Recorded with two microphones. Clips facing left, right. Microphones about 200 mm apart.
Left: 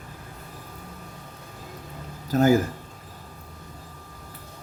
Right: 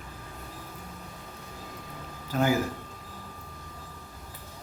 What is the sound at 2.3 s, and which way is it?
Speech, 40° left (ahead or behind).